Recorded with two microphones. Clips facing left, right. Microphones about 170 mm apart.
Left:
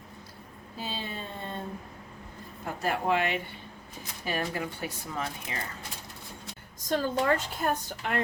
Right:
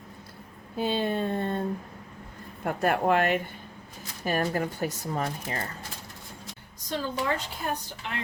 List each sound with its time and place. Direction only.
0.8 s speech: 55° right (ahead or behind)
2.6 s speech: 60° right (ahead or behind); by 5.5 s 40° right (ahead or behind)
6.8 s a woman's voice: 50° left (ahead or behind)